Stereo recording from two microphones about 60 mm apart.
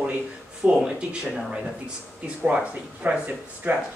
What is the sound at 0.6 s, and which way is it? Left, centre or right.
Speech, centre.